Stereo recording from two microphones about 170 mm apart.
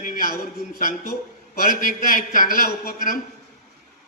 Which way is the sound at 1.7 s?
55° left (ahead or behind).